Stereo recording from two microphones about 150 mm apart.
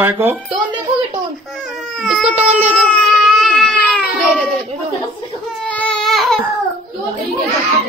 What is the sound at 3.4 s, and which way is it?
Baby cry, centre (ahead or behind).